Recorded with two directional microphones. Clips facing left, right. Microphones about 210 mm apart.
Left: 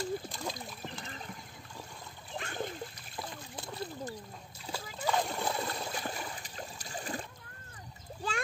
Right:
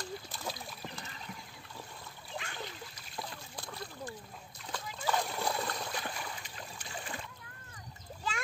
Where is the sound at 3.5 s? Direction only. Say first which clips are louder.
Left 5 dB; 25° left (ahead or behind).